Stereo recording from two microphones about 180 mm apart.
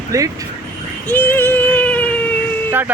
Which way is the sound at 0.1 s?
20° right (ahead or behind).